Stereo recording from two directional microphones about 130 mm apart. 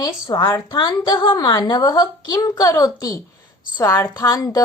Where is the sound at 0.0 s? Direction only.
35° left (ahead or behind).